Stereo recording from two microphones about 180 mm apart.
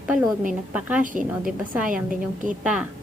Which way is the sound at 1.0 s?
45° right (ahead or behind).